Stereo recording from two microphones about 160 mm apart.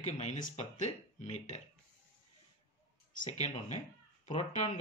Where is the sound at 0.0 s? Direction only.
45° left (ahead or behind).